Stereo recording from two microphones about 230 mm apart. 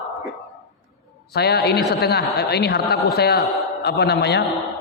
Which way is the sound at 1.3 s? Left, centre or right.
Left.